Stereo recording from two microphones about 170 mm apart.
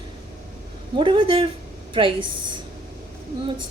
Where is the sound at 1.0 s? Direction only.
30° right (ahead or behind).